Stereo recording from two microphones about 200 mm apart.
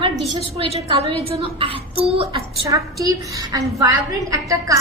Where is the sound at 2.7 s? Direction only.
15° right (ahead or behind).